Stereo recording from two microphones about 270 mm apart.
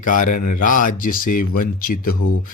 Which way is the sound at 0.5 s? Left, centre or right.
Left.